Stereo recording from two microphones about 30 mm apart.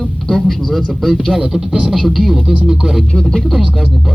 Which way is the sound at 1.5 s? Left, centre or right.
Centre.